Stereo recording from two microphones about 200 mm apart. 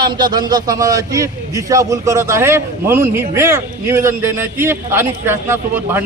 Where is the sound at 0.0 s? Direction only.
20° right (ahead or behind).